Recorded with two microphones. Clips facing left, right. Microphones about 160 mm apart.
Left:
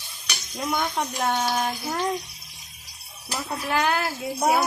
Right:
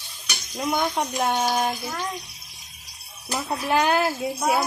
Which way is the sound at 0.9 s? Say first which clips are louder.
Right 2 dB; 15° right (ahead or behind).